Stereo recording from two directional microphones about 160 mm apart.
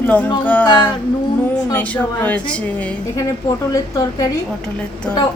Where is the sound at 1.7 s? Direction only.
10° left (ahead or behind).